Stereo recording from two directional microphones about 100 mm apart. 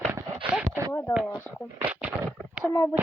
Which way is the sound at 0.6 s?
25° right (ahead or behind).